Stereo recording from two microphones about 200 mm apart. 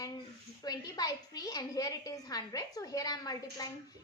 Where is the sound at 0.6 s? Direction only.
20° left (ahead or behind).